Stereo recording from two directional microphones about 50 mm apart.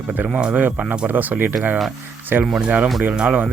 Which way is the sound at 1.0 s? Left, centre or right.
Right.